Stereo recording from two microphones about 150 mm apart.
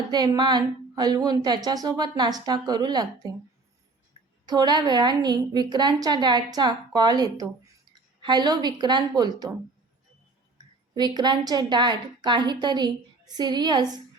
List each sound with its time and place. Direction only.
0.1 s a woman's voice: 30° right (ahead or behind)
4.4 s a woman's voice: 30° right (ahead or behind)
10.9 s a woman's voice: 30° right (ahead or behind)